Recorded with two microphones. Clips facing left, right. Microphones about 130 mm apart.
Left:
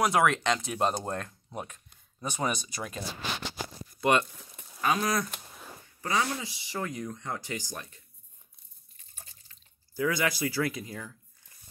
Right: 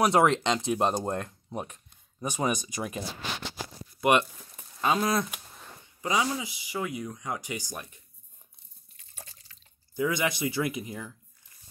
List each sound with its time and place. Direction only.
0.0 s speech: 25° right (ahead or behind)
4.0 s speech: 20° right (ahead or behind)
5.3 s a sound: centre (ahead or behind)
5.9 s speech: 15° right (ahead or behind)
8.9 s drip: 90° right
9.9 s speech: 20° right (ahead or behind)